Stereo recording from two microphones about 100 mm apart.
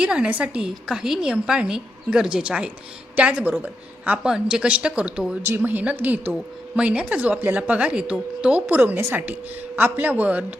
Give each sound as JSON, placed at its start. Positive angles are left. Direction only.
{"t": 0.0, "sound": "a woman's voice", "side_deg": -10}
{"t": 8.6, "sound": "a woman's voice", "side_deg": -20}